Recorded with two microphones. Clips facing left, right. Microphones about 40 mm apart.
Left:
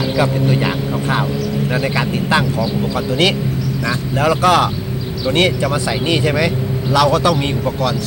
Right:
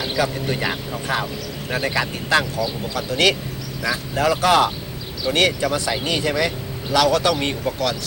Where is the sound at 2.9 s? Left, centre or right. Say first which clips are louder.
Left 1 dB; left.